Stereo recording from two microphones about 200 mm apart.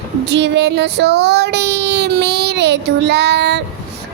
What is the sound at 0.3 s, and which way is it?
A child's voice, 60° right (ahead or behind).